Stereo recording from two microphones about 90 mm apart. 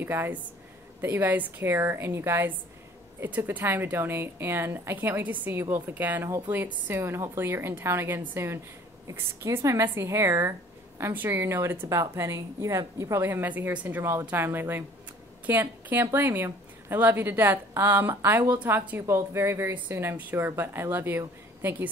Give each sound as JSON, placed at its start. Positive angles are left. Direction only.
{"t": 0.0, "sound": "a woman's voice", "side_deg": -25}